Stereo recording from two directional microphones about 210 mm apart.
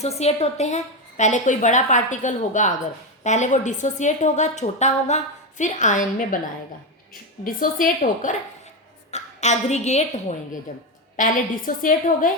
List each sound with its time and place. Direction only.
0.0 s a woman's voice: 30° left (ahead or behind)